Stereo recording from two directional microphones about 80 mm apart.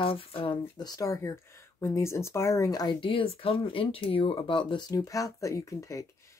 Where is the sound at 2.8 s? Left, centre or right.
Left.